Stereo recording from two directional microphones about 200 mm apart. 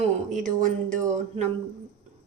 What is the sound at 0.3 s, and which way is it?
A woman's voice, 40° right (ahead or behind).